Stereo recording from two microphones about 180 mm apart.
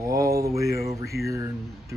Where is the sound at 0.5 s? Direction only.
60° left (ahead or behind).